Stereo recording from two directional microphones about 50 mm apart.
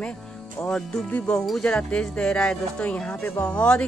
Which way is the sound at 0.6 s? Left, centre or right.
Left.